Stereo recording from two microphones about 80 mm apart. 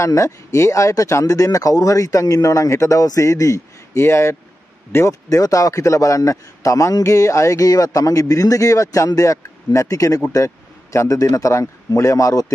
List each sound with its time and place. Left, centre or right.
0.0 s a man's voice: left